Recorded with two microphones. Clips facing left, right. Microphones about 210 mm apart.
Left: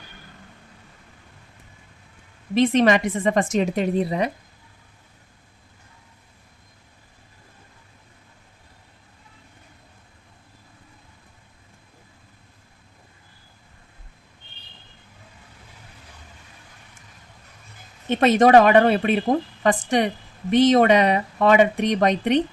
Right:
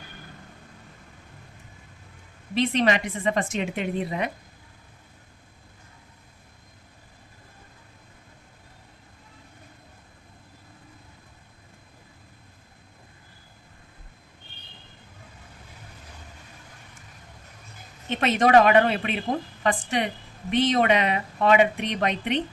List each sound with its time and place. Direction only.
2.6 s a woman's voice: 45° left (ahead or behind)
18.2 s speech: 40° left (ahead or behind)